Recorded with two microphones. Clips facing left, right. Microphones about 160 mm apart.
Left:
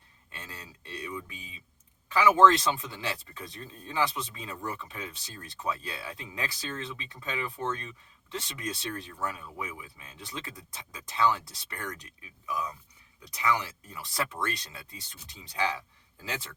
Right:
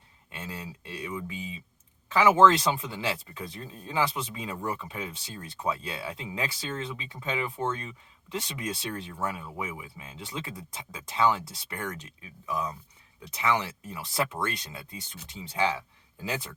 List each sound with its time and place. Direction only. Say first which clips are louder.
0.3 s speech: right 7 dB; 20° right (ahead or behind)